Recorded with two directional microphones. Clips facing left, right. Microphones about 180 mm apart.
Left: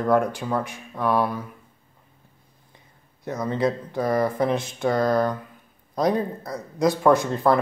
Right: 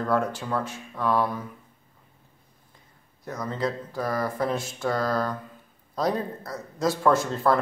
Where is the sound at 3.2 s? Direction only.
25° left (ahead or behind).